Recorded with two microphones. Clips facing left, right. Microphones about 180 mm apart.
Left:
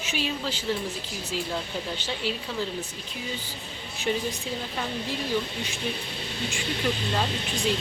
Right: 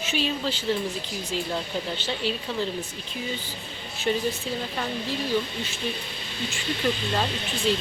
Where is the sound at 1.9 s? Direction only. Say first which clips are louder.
Right 2 dB; 10° left (ahead or behind).